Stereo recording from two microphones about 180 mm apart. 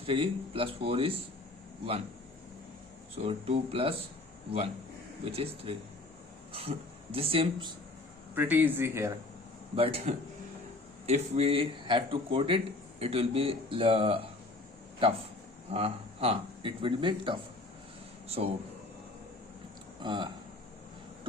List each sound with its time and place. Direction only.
0.0 s a man's voice: 30° right (ahead or behind)
3.2 s a man's voice: 30° right (ahead or behind)
5.2 s a man's voice: 30° right (ahead or behind)
8.4 s speech: 10° right (ahead or behind)
9.7 s a man's voice: 30° right (ahead or behind)
15.7 s speech: 35° right (ahead or behind)
20.0 s speech: 25° right (ahead or behind)